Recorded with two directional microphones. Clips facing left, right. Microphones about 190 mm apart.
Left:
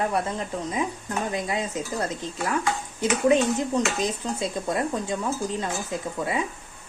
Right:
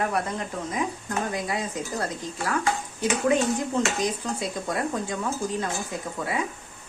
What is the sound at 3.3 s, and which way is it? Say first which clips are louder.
Speech: left 3 dB; 20° left (ahead or behind).